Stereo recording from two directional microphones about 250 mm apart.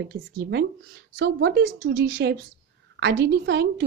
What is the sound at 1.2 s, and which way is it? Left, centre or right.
Speech, right.